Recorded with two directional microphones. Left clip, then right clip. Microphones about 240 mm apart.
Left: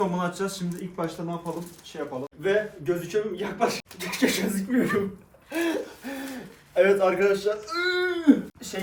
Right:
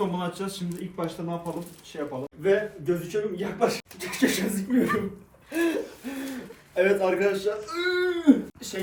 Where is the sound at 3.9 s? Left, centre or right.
Centre.